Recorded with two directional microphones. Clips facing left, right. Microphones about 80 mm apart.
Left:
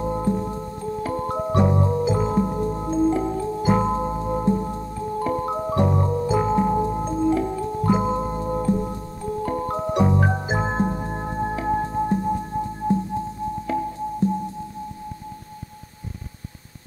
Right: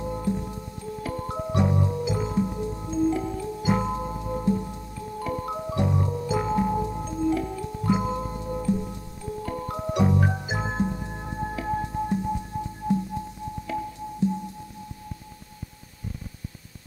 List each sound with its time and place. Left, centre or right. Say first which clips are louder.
0.0 s music: left 5 dB; left